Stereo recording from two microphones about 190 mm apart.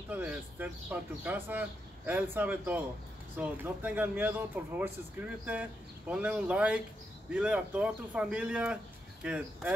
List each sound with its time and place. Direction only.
0.1 s speech: 10° right (ahead or behind)